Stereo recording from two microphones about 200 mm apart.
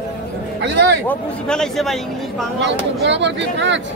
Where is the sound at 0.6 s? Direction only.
55° right (ahead or behind).